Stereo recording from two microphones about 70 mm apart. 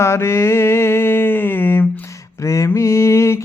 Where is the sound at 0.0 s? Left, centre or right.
Left.